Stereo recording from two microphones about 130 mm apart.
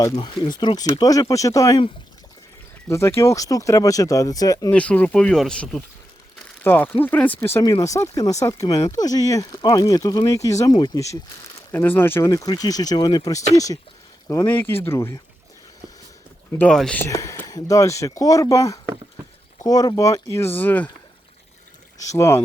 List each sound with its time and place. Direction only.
0.0 s speech: 30° left (ahead or behind)
2.9 s speech: 20° left (ahead or behind)
4.7 s speech: 10° left (ahead or behind)
7.6 s speech: 25° left (ahead or behind)
11.7 s speech: 15° left (ahead or behind)
12.3 s speech: 30° left (ahead or behind)
16.6 s speech: 5° left (ahead or behind)
17.0 s speech: 25° left (ahead or behind)
22.2 s speech: 20° left (ahead or behind)